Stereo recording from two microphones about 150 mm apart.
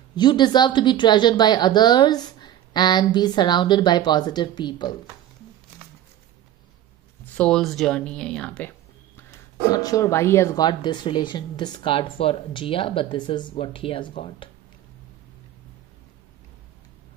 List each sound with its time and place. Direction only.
0.1 s a woman's voice: 30° left (ahead or behind)
7.3 s speech: 5° left (ahead or behind)
9.7 s speech: 25° left (ahead or behind)